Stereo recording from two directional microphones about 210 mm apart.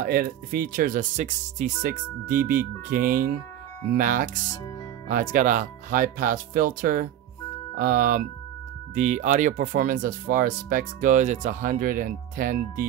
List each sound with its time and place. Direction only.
0.0 s speech: 45° right (ahead or behind)